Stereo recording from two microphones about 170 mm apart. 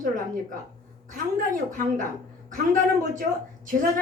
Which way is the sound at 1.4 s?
50° right (ahead or behind).